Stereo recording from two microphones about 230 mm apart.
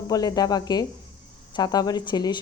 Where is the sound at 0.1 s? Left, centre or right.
Centre.